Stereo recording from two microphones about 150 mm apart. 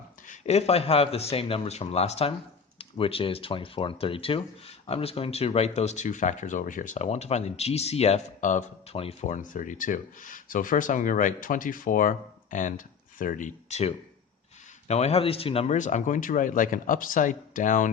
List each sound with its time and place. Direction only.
0.3 s speech: 45° left (ahead or behind)
9.0 s speech: 45° left (ahead or behind)